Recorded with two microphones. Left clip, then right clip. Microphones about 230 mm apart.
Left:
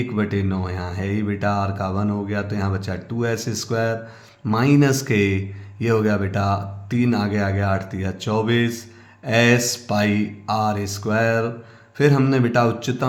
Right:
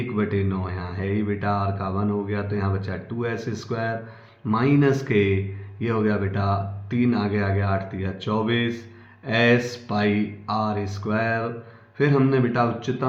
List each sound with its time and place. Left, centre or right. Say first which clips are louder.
0.2 s mantra: even; left